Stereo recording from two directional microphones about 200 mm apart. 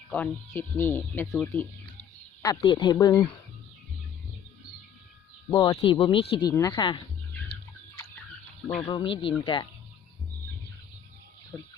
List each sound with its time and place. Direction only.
0.1 s speech: 10° left (ahead or behind)
2.4 s speech: 20° left (ahead or behind)
5.5 s speech: 20° left (ahead or behind)
8.6 s speech: 25° left (ahead or behind)
11.5 s speech: centre (ahead or behind)